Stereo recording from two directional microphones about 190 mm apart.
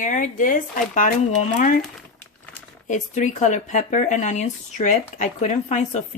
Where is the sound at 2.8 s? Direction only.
40° left (ahead or behind).